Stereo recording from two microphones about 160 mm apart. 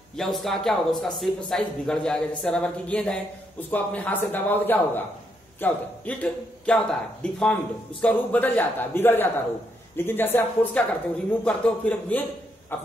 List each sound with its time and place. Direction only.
0.1 s a man's voice: centre (ahead or behind)